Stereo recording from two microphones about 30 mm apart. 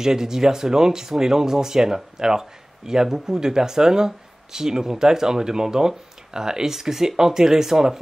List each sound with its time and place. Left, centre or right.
0.0 s speech: centre